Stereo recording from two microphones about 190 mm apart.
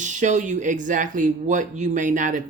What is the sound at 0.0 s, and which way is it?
Speech, 40° right (ahead or behind).